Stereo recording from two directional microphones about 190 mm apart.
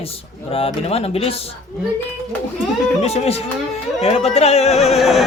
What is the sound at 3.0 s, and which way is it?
Speech, 35° left (ahead or behind).